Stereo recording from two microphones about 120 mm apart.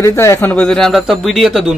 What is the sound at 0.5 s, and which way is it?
Speech, 5° left (ahead or behind).